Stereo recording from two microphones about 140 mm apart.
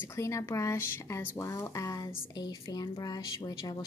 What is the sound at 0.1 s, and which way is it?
Speech, 20° left (ahead or behind).